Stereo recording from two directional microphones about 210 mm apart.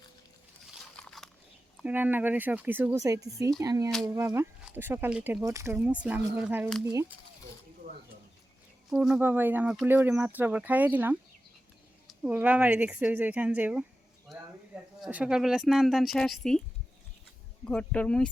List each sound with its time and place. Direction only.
0.7 s a sound: centre (ahead or behind)
1.8 s speech: 10° right (ahead or behind)
6.7 s speech: centre (ahead or behind)
8.9 s speech: 5° right (ahead or behind)
12.2 s speech: 5° right (ahead or behind)
14.3 s a sound: centre (ahead or behind)
15.0 s speech: 5° right (ahead or behind)
17.7 s speech: 5° left (ahead or behind)